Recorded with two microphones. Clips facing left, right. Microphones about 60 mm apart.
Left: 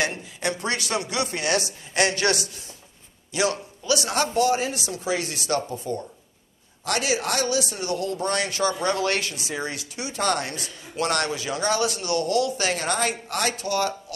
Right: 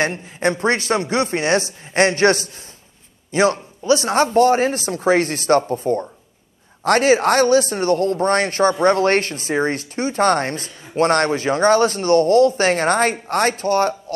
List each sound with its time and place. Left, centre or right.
0.0 s speech: right